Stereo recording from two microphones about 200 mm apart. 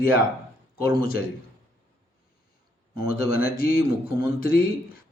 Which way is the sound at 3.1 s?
45° left (ahead or behind).